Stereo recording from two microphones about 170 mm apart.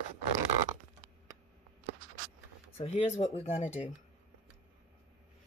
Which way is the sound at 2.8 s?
35° left (ahead or behind).